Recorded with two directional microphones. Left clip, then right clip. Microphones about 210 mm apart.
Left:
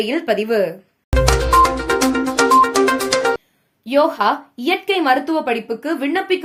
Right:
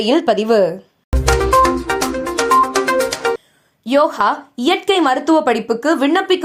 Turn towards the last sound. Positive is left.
turn(degrees=-20)  # may be behind; listen again after turning